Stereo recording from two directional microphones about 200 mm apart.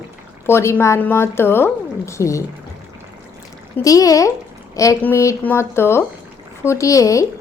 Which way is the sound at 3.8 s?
15° left (ahead or behind).